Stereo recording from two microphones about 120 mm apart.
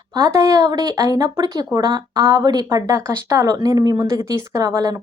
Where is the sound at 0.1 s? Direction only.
30° right (ahead or behind).